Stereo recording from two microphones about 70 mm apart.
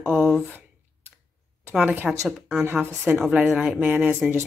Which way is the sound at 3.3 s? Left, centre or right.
Centre.